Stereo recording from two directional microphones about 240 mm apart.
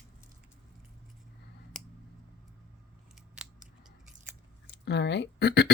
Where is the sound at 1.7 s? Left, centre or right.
Centre.